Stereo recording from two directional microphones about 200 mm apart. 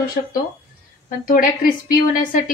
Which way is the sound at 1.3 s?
45° left (ahead or behind).